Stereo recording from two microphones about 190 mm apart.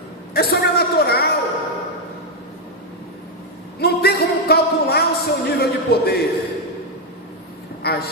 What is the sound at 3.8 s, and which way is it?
Music, 55° left (ahead or behind).